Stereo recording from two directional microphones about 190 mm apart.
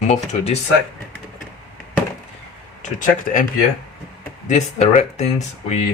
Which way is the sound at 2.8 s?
45° left (ahead or behind).